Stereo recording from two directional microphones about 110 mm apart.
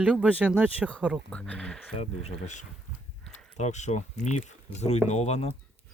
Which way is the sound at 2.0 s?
85° left.